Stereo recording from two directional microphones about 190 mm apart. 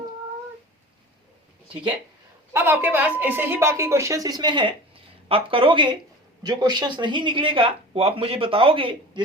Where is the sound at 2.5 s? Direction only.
10° right (ahead or behind).